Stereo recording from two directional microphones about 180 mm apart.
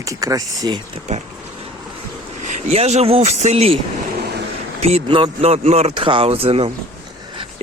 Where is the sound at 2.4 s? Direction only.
45° right (ahead or behind).